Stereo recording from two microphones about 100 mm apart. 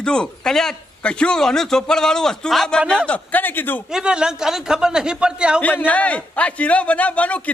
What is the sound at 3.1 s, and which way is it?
Speech, 15° left (ahead or behind).